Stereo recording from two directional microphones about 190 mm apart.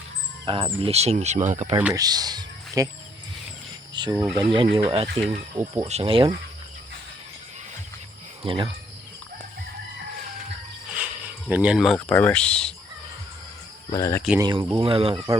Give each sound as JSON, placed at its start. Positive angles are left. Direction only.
{"t": 0.4, "sound": "speech", "side_deg": -25}
{"t": 1.9, "sound": "speech", "side_deg": -20}
{"t": 4.1, "sound": "speech", "side_deg": -10}
{"t": 4.4, "sound": "speech", "side_deg": -25}
{"t": 5.5, "sound": "speech", "side_deg": -15}
{"t": 5.9, "sound": "speech", "side_deg": -30}
{"t": 8.4, "sound": "speech", "side_deg": -25}
{"t": 10.9, "sound": "a sound", "side_deg": -5}
{"t": 11.9, "sound": "speech", "side_deg": 10}
{"t": 13.9, "sound": "speech", "side_deg": 15}
{"t": 14.3, "sound": "speech", "side_deg": -20}